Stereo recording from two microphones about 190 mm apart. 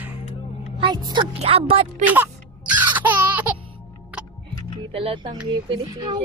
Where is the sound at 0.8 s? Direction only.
25° right (ahead or behind).